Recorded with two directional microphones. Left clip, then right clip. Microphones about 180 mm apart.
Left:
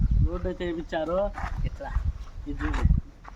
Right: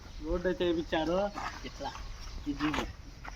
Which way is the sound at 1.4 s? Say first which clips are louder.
Left 2 dB; centre (ahead or behind).